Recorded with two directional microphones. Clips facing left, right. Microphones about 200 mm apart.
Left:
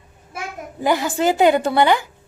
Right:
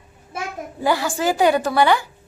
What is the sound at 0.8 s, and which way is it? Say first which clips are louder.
A woman's voice: left 2 dB; 20° left (ahead or behind).